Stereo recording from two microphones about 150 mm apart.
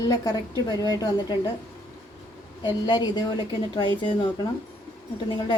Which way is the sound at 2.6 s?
30° left (ahead or behind).